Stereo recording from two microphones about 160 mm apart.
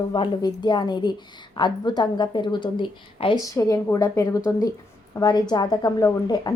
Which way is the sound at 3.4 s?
20° left (ahead or behind).